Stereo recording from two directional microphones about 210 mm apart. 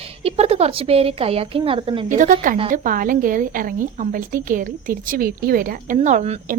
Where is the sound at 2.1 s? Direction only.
35° right (ahead or behind).